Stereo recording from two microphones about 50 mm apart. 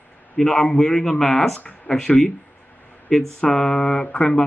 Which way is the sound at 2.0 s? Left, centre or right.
Centre.